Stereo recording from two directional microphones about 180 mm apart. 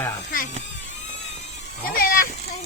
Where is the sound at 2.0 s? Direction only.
55° left (ahead or behind).